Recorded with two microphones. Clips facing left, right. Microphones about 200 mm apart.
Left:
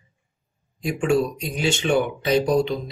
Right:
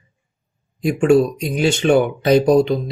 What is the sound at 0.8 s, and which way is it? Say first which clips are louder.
Speech: right 7 dB; 60° right (ahead or behind).